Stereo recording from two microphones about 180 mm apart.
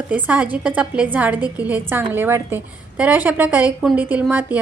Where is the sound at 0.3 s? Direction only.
10° right (ahead or behind).